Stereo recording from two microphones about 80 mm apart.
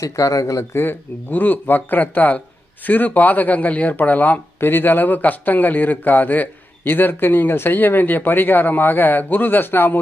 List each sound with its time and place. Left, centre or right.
0.0 s speech: left
0.7 s speech: left